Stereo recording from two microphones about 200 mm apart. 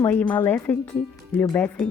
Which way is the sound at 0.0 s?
10° left (ahead or behind).